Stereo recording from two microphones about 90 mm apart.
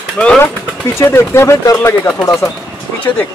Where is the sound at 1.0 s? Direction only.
30° left (ahead or behind).